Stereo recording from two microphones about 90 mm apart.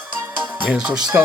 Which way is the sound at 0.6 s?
10° right (ahead or behind).